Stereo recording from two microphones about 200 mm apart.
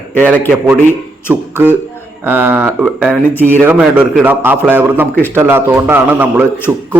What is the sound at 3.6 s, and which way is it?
A man's voice, 10° right (ahead or behind).